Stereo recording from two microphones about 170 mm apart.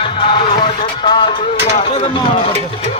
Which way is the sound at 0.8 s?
30° left (ahead or behind).